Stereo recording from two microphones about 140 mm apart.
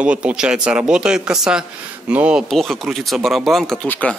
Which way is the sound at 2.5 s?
Centre (ahead or behind).